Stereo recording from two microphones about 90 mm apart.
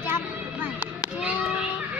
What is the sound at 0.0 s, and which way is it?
Children playing, 20° right (ahead or behind).